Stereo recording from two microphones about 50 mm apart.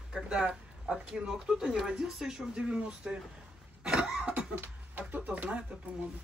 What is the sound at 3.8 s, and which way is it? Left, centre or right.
Cough, centre.